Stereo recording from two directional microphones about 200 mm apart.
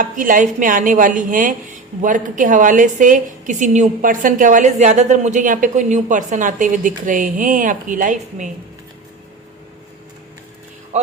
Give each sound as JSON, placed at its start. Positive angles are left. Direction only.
{"t": 0.0, "sound": "speech", "side_deg": -40}